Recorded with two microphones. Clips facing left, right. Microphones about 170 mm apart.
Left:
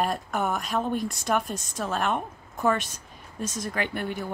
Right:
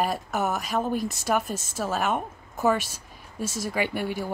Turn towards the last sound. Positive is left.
turn(degrees=-10)  # may be behind; listen again after turning